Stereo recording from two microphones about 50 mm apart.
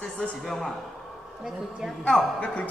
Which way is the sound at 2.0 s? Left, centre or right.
Centre.